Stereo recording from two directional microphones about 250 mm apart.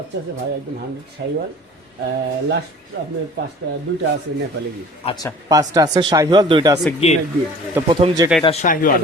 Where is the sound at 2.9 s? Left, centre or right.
Right.